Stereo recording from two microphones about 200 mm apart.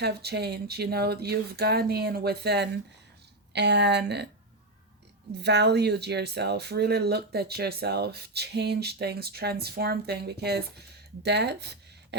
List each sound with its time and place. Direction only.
0.0 s speech: 55° right (ahead or behind)
5.4 s speech: 55° right (ahead or behind)